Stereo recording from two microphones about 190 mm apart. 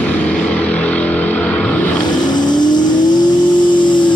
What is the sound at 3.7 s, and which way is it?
Music, 25° left (ahead or behind).